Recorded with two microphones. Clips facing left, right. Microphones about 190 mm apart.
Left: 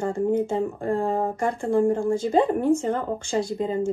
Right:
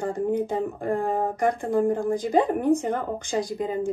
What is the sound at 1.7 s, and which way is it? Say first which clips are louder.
Speech: left 5 dB; 30° left (ahead or behind).